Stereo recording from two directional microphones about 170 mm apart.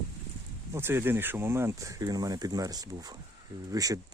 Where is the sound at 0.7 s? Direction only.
15° right (ahead or behind).